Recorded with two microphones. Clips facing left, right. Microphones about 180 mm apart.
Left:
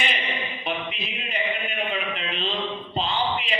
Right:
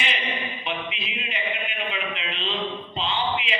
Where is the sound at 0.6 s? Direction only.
40° left (ahead or behind).